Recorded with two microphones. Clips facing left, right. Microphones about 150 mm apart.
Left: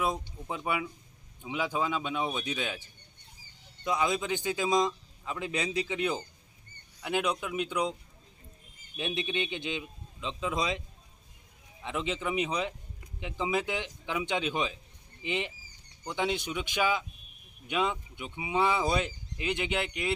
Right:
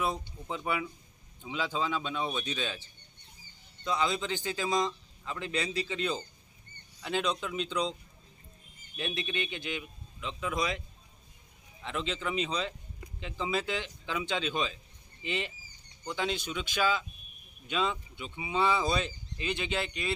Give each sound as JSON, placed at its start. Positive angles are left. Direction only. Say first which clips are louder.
{"t": 0.0, "sound": "speech", "louder": "left 1 dB", "side_deg": 15}
{"t": 9.0, "sound": "a man's voice", "louder": "left 3 dB", "side_deg": 20}